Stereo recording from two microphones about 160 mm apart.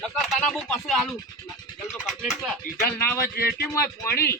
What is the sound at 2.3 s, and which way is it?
Speech, centre (ahead or behind).